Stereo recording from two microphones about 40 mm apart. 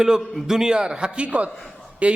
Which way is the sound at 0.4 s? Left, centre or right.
Centre.